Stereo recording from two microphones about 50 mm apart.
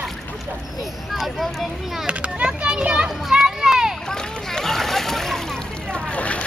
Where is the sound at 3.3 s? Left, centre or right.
Centre.